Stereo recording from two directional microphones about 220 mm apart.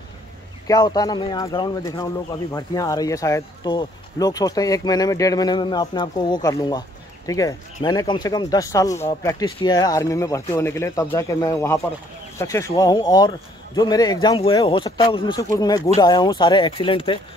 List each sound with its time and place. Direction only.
0.7 s speech: 15° left (ahead or behind)